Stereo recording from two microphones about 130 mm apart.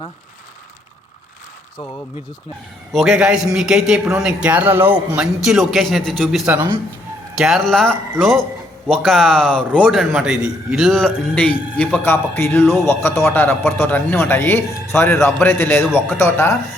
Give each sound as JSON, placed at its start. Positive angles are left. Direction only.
{"t": 2.9, "sound": "a man's voice", "side_deg": -5}
{"t": 7.3, "sound": "a man's voice", "side_deg": 0}